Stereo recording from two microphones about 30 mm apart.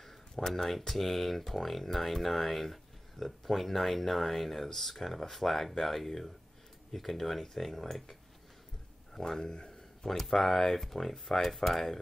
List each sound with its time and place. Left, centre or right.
0.0 s a sound: centre
0.8 s speech: centre; by 9.8 s left
10.0 s speech: centre
11.4 s speech: centre